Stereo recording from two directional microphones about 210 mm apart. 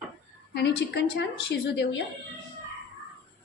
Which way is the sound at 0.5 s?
55° left (ahead or behind).